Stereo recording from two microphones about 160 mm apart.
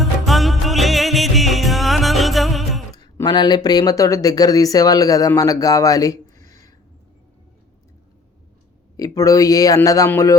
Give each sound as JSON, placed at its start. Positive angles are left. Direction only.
{"t": 0.0, "sound": "music", "side_deg": 0}
{"t": 2.9, "sound": "speech", "side_deg": 25}
{"t": 9.0, "sound": "a man's voice", "side_deg": 20}